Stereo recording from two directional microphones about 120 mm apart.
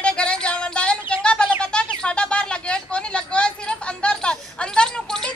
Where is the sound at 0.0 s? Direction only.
10° left (ahead or behind).